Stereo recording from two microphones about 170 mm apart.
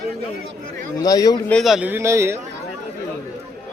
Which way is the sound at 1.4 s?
5° left (ahead or behind).